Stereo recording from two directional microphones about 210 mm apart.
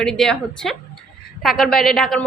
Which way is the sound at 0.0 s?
5° left (ahead or behind).